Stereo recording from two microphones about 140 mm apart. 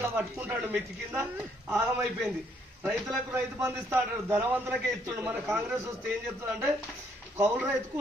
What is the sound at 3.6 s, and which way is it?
A man's voice, 15° right (ahead or behind).